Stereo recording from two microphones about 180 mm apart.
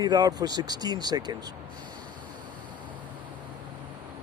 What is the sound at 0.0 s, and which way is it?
Speech, 20° right (ahead or behind).